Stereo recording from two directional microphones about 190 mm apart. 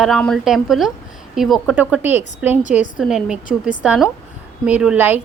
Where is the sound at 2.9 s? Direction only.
5° right (ahead or behind).